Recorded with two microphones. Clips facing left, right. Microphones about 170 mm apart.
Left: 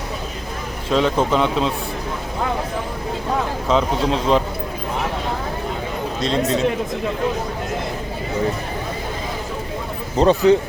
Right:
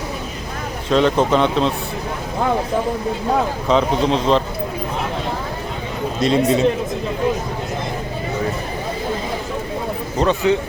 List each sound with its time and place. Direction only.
0.9 s speech: 5° left (ahead or behind)
3.7 s a man's voice: 5° left (ahead or behind)
6.2 s a man's voice: 10° right (ahead or behind)
10.2 s a man's voice: 35° left (ahead or behind)